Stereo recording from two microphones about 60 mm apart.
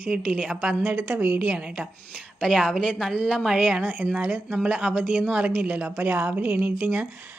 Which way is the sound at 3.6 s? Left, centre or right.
Centre.